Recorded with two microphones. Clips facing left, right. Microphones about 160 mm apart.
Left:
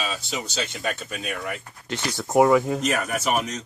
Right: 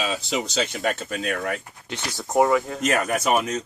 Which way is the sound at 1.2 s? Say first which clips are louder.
Right 5 dB; 90° right.